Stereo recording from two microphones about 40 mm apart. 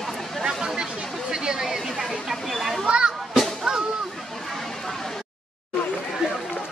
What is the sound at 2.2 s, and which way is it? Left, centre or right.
Chatter, centre.